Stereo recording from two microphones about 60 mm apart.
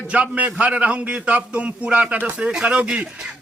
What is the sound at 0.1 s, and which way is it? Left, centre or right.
Speech, right.